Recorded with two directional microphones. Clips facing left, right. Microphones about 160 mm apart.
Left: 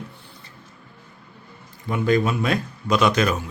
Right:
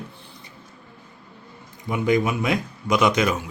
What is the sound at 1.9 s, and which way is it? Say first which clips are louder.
Speech: even; 15° right (ahead or behind).